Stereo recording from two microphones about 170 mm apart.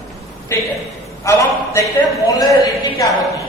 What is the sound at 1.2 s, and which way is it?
A man's voice, 15° left (ahead or behind).